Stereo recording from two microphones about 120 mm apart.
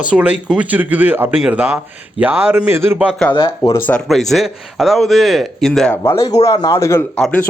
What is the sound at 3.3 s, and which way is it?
Speech, 45° left (ahead or behind).